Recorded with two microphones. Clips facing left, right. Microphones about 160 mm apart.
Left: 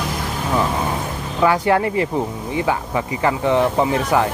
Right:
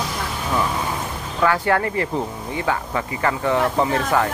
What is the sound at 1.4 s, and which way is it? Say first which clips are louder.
Speech: left 3 dB; 15° left (ahead or behind).